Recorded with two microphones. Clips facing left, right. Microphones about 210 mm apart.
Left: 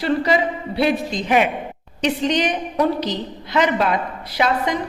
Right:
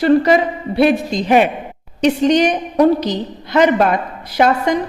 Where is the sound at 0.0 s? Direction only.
50° right (ahead or behind).